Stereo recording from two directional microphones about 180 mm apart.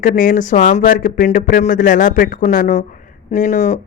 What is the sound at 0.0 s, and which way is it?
Speech, 45° left (ahead or behind).